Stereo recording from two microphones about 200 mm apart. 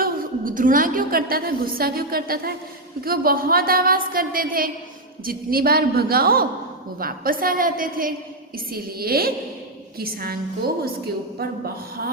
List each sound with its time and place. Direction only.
0.0 s a woman's voice: 45° right (ahead or behind)